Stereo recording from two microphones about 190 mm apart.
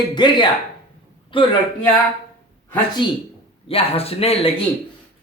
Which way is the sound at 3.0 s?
25° left (ahead or behind).